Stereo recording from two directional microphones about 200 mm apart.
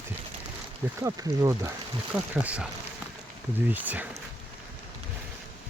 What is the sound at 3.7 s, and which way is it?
Speech, 10° right (ahead or behind).